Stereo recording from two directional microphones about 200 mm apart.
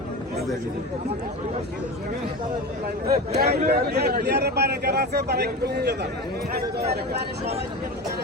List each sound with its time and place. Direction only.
3.3 s speech: 55° right (ahead or behind)